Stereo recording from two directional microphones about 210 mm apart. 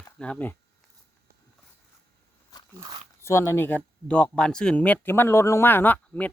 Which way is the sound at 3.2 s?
10° left (ahead or behind).